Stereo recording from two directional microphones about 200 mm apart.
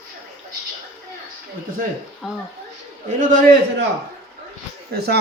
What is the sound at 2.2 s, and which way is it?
Speech, centre (ahead or behind).